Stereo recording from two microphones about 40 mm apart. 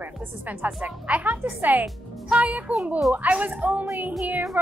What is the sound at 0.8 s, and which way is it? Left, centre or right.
A woman's voice, right.